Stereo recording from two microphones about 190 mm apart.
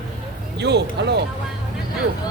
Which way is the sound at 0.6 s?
65° right (ahead or behind).